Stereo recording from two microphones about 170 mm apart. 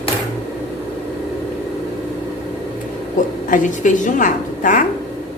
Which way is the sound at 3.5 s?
50° left (ahead or behind).